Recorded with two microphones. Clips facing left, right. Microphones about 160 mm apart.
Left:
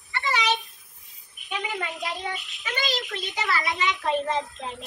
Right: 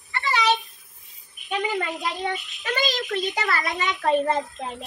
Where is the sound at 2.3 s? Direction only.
Centre (ahead or behind).